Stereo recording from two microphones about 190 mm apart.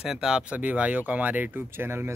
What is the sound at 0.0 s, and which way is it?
Speech, 5° right (ahead or behind).